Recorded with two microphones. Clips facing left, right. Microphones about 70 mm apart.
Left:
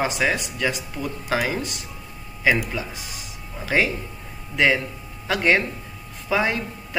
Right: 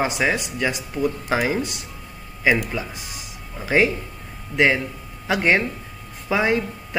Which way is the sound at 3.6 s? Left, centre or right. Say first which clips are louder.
Right 3 dB; centre.